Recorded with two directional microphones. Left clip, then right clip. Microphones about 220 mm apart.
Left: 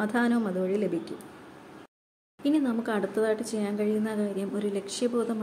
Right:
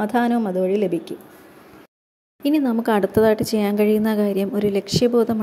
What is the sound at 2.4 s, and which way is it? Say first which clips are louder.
Speech: right 8 dB; 30° right (ahead or behind).